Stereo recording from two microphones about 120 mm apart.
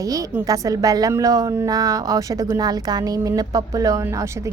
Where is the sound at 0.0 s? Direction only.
30° right (ahead or behind).